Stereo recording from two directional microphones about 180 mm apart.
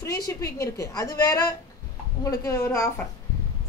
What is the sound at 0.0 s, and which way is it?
A woman's voice, 15° left (ahead or behind).